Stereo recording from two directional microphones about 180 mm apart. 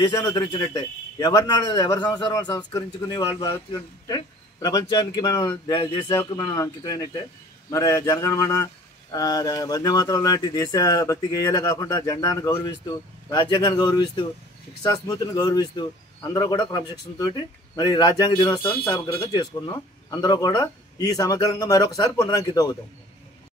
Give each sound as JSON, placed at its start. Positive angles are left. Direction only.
{"t": 0.0, "sound": "speech", "side_deg": 20}